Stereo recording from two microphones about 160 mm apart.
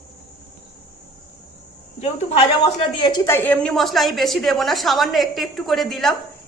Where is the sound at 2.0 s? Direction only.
40° left (ahead or behind).